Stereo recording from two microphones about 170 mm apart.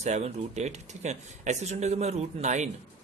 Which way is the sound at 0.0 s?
40° right (ahead or behind).